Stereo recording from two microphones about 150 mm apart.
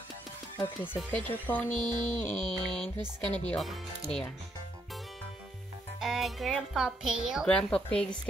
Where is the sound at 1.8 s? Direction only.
30° right (ahead or behind).